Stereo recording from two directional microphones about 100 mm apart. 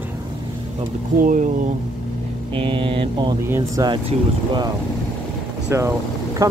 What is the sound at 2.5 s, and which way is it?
Speech, 60° right (ahead or behind).